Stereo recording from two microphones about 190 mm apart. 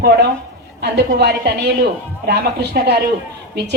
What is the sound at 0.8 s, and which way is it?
A woman's voice, 60° right (ahead or behind).